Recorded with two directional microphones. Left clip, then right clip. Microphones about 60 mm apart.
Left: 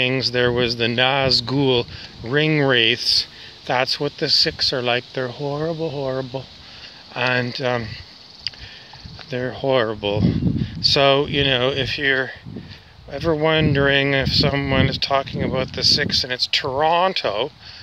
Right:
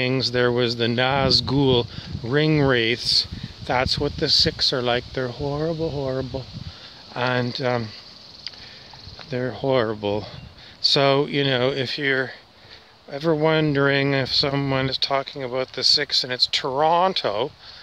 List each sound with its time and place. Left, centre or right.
0.1 s speech: right
2.7 s speech: right
5.4 s speech: centre
5.7 s speech: centre
7.2 s speech: right
9.3 s speech: right
13.8 s speech: right